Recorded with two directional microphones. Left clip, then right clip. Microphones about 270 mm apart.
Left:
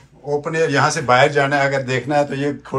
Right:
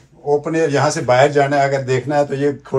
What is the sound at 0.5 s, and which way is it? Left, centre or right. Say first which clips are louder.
A man's voice: left 4 dB; right.